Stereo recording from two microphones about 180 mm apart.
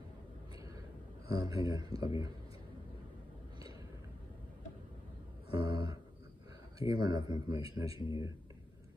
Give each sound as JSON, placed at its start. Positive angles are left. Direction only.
{"t": 1.4, "sound": "speech", "side_deg": -20}
{"t": 5.7, "sound": "a sound", "side_deg": -20}
{"t": 6.8, "sound": "speech", "side_deg": -20}
{"t": 7.9, "sound": "speech", "side_deg": 30}